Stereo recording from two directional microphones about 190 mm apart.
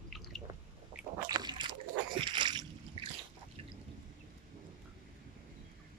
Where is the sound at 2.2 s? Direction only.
25° right (ahead or behind).